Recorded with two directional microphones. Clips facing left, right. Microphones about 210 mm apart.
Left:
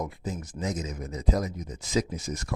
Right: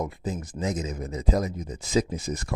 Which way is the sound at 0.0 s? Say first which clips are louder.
Right 3 dB; 25° right (ahead or behind).